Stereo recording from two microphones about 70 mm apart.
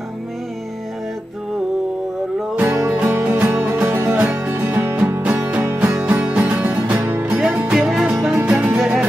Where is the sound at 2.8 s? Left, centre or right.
Right.